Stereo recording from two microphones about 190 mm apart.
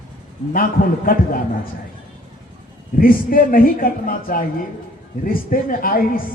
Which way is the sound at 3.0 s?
45° left (ahead or behind).